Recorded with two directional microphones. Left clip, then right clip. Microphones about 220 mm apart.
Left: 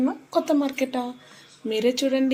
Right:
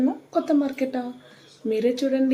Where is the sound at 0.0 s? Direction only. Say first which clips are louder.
Even; 10° left (ahead or behind).